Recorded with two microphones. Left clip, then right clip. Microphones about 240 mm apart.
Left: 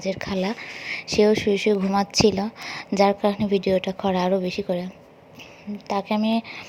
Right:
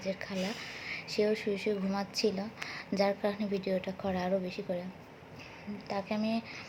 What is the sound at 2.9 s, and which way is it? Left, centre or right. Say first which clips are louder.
A woman's voice: left 11 dB; left.